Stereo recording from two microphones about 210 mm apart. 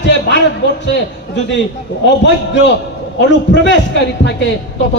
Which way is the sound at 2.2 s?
60° left (ahead or behind).